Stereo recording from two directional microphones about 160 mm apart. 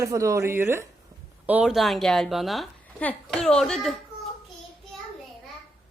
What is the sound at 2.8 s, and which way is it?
Hands, 10° left (ahead or behind).